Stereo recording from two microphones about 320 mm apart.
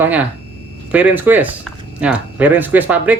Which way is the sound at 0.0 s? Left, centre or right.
Centre.